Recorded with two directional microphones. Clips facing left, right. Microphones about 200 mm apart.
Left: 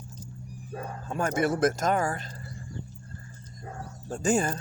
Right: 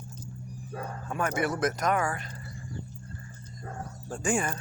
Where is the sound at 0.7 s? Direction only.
25° left (ahead or behind).